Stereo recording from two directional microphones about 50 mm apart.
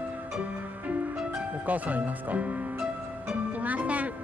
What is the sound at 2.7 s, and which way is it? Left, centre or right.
Music, right.